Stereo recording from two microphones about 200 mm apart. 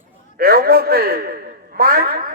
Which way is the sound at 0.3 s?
50° right (ahead or behind).